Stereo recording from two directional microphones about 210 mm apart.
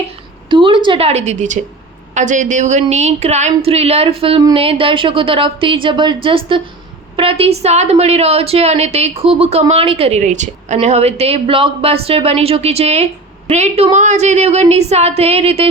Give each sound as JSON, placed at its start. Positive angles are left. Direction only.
{"t": 0.4, "sound": "a woman's voice", "side_deg": -25}